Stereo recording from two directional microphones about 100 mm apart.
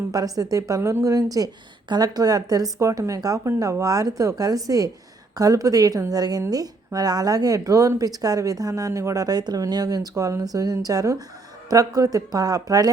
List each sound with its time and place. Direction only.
0.1 s speech: 35° right (ahead or behind)